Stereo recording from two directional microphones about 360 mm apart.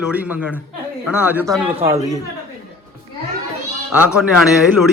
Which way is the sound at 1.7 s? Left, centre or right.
Centre.